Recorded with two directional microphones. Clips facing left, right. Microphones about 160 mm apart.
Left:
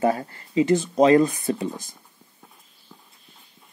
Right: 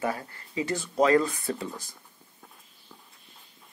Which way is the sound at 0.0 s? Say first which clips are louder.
Left 8 dB; 25° left (ahead or behind).